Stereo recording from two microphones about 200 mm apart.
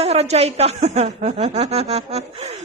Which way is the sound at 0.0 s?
30° right (ahead or behind).